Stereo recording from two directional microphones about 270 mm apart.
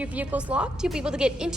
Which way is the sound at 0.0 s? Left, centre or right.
Centre.